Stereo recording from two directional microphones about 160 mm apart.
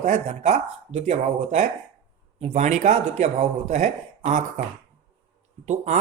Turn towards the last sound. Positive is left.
turn(degrees=-45)  # may be behind; listen again after turning